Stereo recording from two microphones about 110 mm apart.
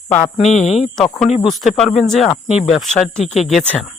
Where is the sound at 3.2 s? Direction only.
90° left.